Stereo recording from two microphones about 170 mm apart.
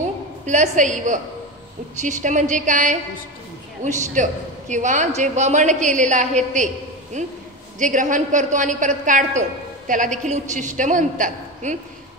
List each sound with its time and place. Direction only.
0.5 s a woman's voice: 45° right (ahead or behind)